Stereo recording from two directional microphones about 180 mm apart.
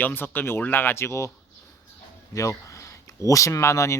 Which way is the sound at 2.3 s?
15° left (ahead or behind).